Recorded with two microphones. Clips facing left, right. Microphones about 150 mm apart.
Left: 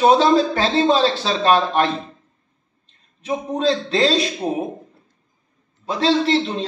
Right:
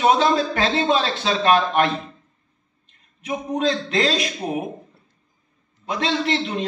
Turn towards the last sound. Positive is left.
turn(degrees=30)  # may be behind; listen again after turning